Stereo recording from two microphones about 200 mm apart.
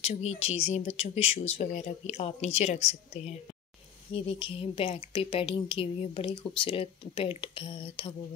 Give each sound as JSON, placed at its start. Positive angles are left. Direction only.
{"t": 0.4, "sound": "a woman's voice", "side_deg": 30}